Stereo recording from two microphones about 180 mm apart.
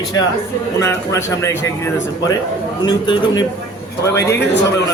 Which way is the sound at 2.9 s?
25° left (ahead or behind).